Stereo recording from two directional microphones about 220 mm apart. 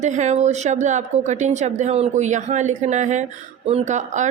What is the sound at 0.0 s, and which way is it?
A woman's voice, 30° right (ahead or behind).